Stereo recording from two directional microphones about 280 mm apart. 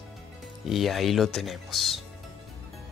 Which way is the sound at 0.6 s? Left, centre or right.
Centre.